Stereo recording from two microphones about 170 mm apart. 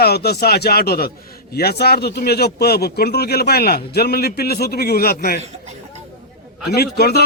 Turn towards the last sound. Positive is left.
turn(degrees=65)  # may be behind; listen again after turning